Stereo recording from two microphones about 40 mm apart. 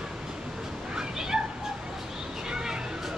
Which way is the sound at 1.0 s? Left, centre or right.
Centre.